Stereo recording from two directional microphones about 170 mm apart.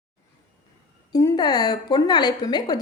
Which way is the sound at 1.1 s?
20° left (ahead or behind).